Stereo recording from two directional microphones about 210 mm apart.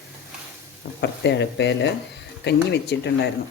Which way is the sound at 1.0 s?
55° left (ahead or behind).